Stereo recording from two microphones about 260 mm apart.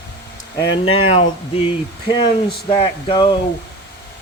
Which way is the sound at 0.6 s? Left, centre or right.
Left.